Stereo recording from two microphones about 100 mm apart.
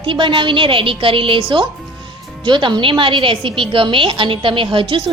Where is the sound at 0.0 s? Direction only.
55° right (ahead or behind).